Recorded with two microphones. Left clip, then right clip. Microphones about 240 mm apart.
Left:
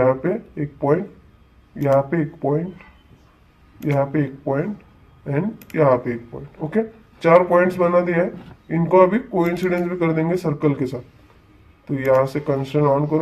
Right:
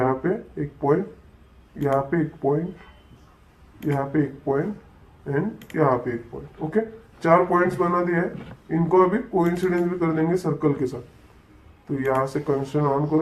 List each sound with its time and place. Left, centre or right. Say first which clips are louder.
0.0 s speech: left 5 dB; left
3.9 s speech: left 4 dB; left
5.7 s speech: left 5 dB; left
9.4 s speech: left 2 dB; left
9.7 s speech: left 2 dB; left
11.9 s speech: left 6 dB; left